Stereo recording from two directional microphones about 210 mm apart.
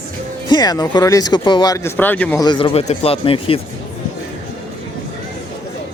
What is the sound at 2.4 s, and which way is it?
Speech, 25° left (ahead or behind).